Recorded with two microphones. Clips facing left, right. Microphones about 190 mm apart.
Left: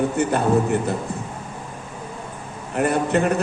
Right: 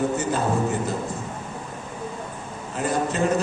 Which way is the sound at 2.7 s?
60° left (ahead or behind).